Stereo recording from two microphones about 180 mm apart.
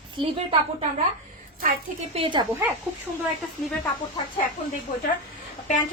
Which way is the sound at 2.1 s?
30° right (ahead or behind).